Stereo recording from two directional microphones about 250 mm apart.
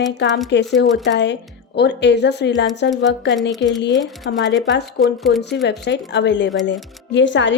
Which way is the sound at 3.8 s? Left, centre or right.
Left.